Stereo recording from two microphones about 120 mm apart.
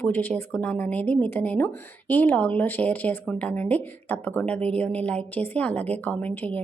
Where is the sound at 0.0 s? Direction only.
15° left (ahead or behind).